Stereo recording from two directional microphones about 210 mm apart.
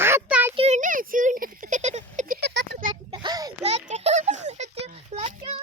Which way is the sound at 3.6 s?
30° right (ahead or behind).